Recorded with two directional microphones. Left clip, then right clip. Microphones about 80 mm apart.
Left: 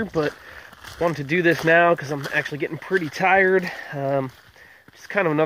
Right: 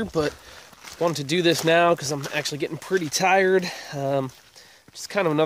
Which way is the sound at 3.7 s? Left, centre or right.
Right.